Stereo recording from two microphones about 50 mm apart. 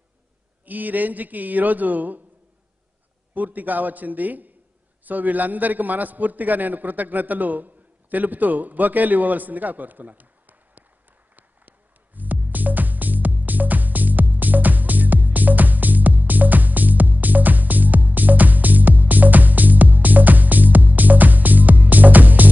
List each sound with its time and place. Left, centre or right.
0.7 s a man's voice: right
3.3 s a man's voice: right
12.2 s music: right